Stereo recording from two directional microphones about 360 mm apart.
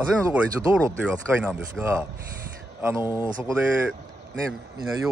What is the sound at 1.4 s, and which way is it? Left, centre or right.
Speech, centre.